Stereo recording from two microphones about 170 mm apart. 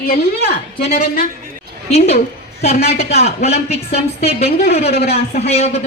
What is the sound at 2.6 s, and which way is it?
A woman's voice, 40° left (ahead or behind).